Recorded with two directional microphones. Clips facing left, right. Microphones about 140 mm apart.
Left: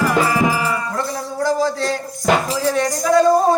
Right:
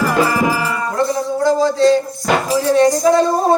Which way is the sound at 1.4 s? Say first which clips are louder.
Right 5 dB; 20° right (ahead or behind).